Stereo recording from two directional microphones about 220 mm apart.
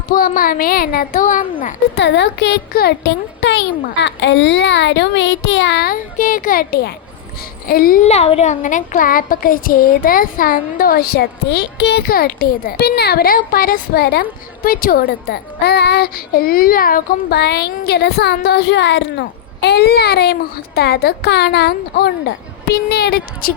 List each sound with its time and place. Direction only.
0.1 s a child's voice: 40° left (ahead or behind)
2.0 s a child's voice: 50° left (ahead or behind)